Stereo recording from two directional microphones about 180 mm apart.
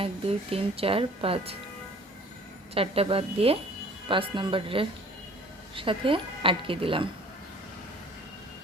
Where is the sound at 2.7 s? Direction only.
30° right (ahead or behind).